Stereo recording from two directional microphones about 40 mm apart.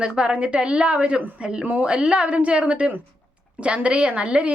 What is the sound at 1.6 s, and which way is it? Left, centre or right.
Speech, right.